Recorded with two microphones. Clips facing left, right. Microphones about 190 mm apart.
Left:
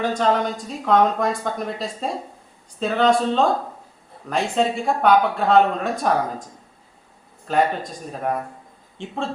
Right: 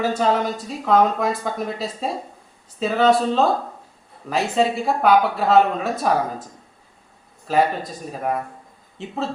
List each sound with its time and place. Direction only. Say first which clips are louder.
0.0 s speech: even; 5° right (ahead or behind)
7.5 s speech: right 1 dB; 5° right (ahead or behind)